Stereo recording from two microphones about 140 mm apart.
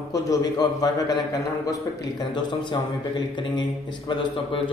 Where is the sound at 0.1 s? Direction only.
30° left (ahead or behind).